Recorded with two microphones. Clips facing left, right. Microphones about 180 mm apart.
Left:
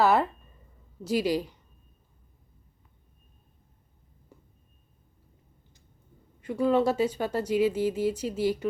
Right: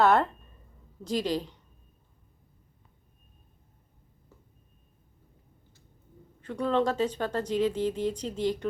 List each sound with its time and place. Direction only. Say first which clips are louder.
0.0 s speech: even; 5° left (ahead or behind)
4.3 s a sound: left 3 dB; 15° left (ahead or behind)
6.4 s speech: left 3 dB; 10° left (ahead or behind)